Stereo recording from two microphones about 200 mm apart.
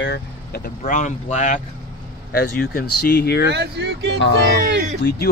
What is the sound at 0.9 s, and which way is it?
Speech, 40° left (ahead or behind).